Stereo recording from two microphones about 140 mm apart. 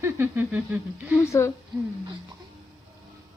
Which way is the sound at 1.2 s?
20° left (ahead or behind).